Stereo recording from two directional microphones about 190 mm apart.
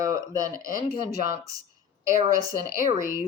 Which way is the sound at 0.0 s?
20° right (ahead or behind).